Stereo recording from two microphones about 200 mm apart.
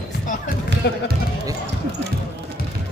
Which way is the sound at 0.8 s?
60° left (ahead or behind).